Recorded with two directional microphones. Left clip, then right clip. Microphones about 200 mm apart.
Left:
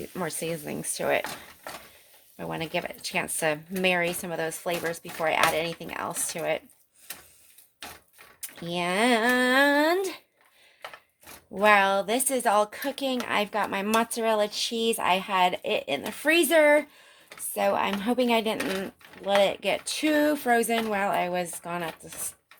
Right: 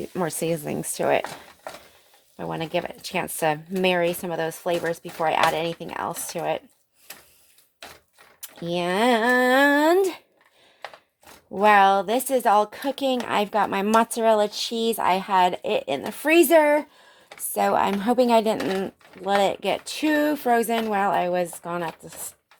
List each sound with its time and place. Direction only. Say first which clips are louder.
0.0 s speech: right 5 dB; 40° right (ahead or behind)
2.4 s a woman's voice: right 4 dB; 40° right (ahead or behind)
8.4 s a woman's voice: right 4 dB; 40° right (ahead or behind)
11.6 s a woman's voice: right 4 dB; 40° right (ahead or behind)
17.5 s a woman's voice: right 4 dB; 50° right (ahead or behind); by 21.9 s 30° right (ahead or behind)